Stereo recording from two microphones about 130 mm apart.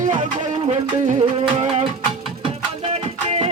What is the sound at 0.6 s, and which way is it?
Music, 55° right (ahead or behind).